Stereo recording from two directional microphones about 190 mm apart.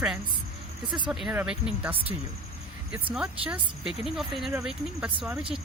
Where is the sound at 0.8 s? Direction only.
25° right (ahead or behind).